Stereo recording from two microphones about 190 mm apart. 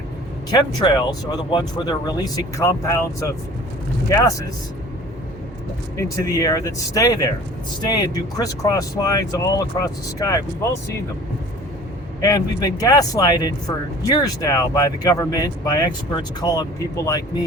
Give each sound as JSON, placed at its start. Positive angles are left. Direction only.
{"t": 0.5, "sound": "speech", "side_deg": 20}
{"t": 6.0, "sound": "speech", "side_deg": 20}
{"t": 12.2, "sound": "speech", "side_deg": 20}